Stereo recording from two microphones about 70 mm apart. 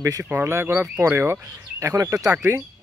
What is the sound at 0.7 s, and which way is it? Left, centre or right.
Speech, centre.